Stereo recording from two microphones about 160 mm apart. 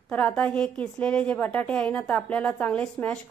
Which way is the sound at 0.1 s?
10° left (ahead or behind).